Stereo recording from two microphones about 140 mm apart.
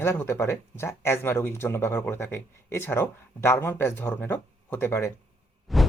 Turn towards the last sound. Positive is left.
turn(degrees=0)  # may be behind; listen again after turning